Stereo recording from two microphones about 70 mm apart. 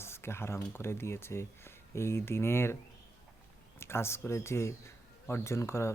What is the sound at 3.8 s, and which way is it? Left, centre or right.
Speech, left.